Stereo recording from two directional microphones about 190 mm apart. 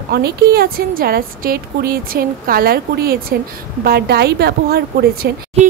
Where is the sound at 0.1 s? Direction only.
55° right (ahead or behind).